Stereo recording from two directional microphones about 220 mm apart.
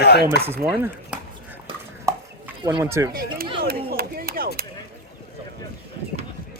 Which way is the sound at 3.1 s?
40° right (ahead or behind).